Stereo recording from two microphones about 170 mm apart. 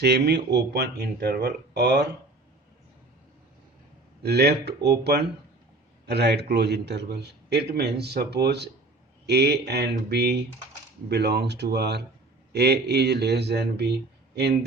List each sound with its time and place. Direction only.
0.0 s a man's voice: 75° right (ahead or behind)
4.2 s a man's voice: 75° right (ahead or behind)